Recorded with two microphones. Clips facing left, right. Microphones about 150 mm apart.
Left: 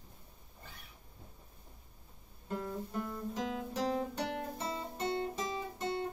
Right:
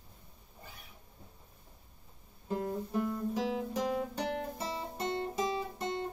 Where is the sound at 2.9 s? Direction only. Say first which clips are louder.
Right 6 dB; 10° right (ahead or behind).